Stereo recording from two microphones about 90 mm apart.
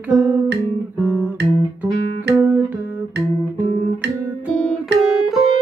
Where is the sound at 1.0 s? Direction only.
15° right (ahead or behind).